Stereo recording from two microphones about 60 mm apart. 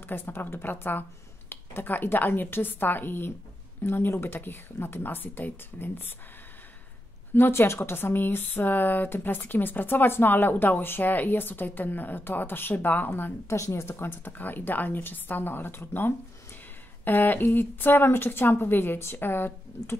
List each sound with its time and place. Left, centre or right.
0.1 s speech: left
7.3 s speech: left
13.5 s a woman's voice: left
13.8 s speech: left